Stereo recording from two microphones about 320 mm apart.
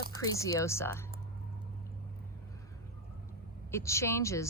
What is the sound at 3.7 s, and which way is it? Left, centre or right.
Speech, centre.